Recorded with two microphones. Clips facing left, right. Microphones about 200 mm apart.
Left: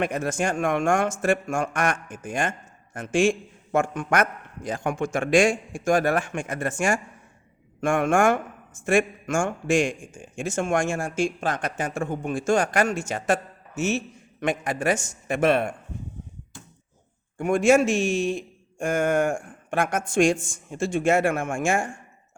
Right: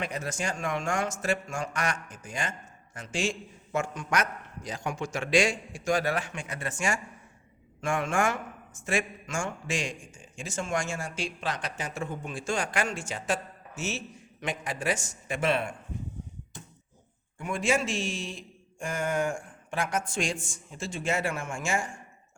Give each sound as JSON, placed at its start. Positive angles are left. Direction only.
{"t": 0.0, "sound": "a man's voice", "side_deg": 50}
{"t": 13.1, "sound": "a man's voice", "side_deg": 60}
{"t": 17.3, "sound": "a man's voice", "side_deg": 50}